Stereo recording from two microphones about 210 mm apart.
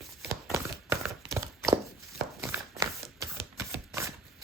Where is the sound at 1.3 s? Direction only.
15° right (ahead or behind).